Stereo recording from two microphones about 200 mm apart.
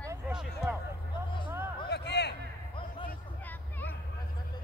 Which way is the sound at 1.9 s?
55° left (ahead or behind).